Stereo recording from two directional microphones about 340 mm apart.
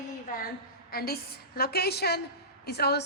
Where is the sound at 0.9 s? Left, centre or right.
Left.